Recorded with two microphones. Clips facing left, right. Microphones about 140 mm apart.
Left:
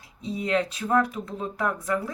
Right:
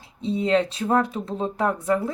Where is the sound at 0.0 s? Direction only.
25° right (ahead or behind).